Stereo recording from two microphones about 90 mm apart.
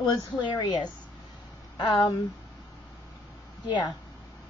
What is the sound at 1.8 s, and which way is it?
Speech, 60° left (ahead or behind).